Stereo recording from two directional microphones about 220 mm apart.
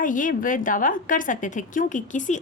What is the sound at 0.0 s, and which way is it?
A woman's voice, 35° left (ahead or behind).